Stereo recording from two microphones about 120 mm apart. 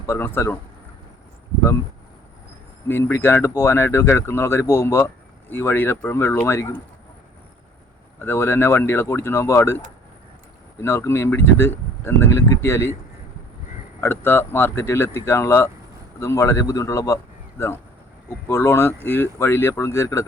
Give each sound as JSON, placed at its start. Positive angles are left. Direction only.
{"t": 0.0, "sound": "speech", "side_deg": 20}
{"t": 2.8, "sound": "speech", "side_deg": 20}
{"t": 8.2, "sound": "speech", "side_deg": 20}
{"t": 14.0, "sound": "speech", "side_deg": 20}
{"t": 18.3, "sound": "speech", "side_deg": 20}